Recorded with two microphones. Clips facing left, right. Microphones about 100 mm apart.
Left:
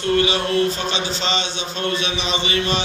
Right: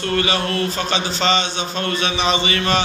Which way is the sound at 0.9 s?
50° right (ahead or behind).